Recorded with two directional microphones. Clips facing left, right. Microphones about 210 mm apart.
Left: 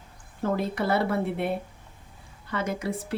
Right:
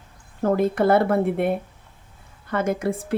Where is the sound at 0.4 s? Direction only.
50° right (ahead or behind).